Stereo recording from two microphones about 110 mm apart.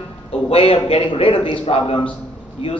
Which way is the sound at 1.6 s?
65° left (ahead or behind).